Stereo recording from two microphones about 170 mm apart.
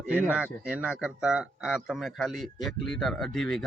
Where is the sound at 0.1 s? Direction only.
10° right (ahead or behind).